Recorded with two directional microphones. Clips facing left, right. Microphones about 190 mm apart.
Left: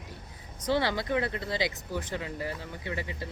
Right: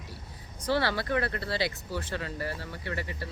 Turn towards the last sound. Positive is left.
turn(degrees=20)  # may be behind; listen again after turning